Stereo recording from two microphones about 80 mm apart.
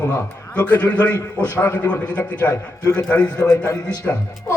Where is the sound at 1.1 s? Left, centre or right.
Left.